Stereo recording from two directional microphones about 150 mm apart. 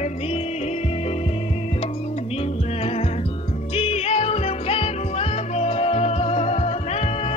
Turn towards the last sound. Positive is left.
turn(degrees=45)  # may be behind; listen again after turning